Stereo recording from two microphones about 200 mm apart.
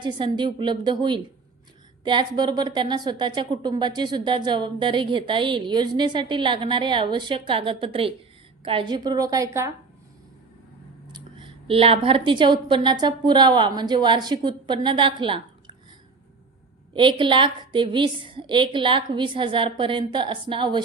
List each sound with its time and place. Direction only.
0.0 s a woman's voice: 25° right (ahead or behind)
11.1 s a woman's voice: 25° right (ahead or behind)
16.9 s a woman's voice: 25° right (ahead or behind)